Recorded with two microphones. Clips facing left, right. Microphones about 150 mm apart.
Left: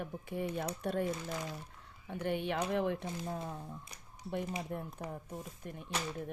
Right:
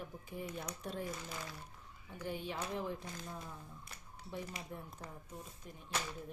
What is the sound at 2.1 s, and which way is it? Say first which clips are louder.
Speech: left 7 dB; 70° left (ahead or behind).